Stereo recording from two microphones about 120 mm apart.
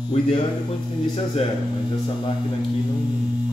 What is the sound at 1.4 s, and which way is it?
Speech, 55° left (ahead or behind).